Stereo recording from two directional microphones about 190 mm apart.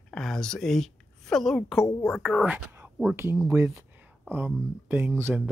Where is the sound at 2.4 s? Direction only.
10° right (ahead or behind).